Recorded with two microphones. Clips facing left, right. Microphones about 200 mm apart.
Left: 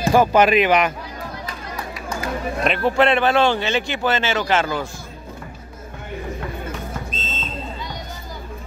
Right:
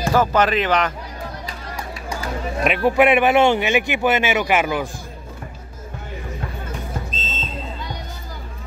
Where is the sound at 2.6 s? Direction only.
10° right (ahead or behind).